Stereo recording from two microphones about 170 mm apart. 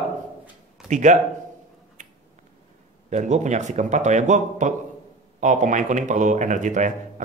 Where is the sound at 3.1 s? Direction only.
45° right (ahead or behind).